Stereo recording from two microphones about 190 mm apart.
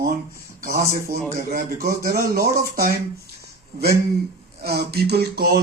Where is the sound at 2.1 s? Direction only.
50° right (ahead or behind).